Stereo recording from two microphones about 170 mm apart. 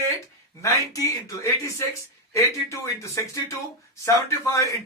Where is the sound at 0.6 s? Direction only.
20° left (ahead or behind).